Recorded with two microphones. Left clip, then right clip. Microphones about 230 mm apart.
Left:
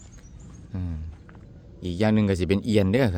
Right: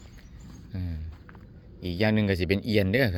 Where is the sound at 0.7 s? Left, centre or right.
Centre.